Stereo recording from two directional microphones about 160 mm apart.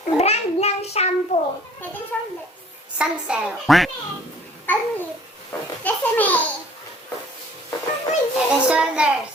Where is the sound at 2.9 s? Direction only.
5° right (ahead or behind).